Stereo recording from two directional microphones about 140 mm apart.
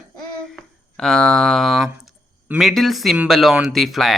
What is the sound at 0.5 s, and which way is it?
Speech, 5° left (ahead or behind).